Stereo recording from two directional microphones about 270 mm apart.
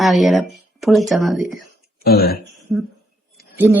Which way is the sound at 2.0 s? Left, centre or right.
Left.